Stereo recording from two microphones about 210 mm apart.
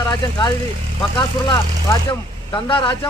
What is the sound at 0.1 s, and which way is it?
A man's voice, 20° left (ahead or behind).